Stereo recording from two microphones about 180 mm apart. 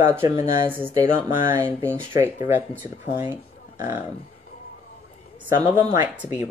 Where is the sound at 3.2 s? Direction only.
10° right (ahead or behind).